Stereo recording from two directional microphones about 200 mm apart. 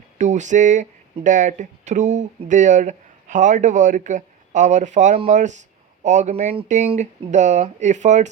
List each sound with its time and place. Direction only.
0.2 s speech: 35° right (ahead or behind)